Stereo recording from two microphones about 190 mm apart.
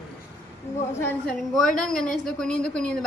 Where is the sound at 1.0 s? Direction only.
5° left (ahead or behind).